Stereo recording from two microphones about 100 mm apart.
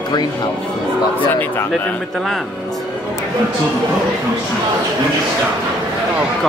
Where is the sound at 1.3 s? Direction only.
15° left (ahead or behind).